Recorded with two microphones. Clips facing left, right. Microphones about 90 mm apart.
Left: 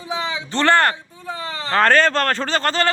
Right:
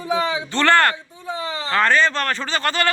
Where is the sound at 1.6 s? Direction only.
40° left (ahead or behind).